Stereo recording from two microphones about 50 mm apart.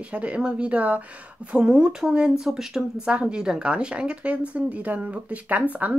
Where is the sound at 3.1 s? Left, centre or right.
Right.